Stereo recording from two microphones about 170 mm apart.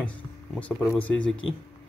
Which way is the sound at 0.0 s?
10° left (ahead or behind).